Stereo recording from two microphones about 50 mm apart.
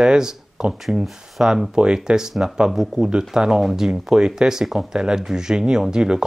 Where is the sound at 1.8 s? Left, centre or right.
Centre.